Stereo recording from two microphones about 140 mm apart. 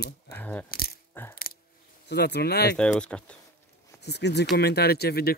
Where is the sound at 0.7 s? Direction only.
90° left.